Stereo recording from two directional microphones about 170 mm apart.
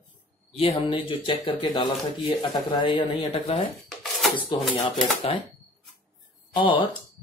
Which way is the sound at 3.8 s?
Centre (ahead or behind).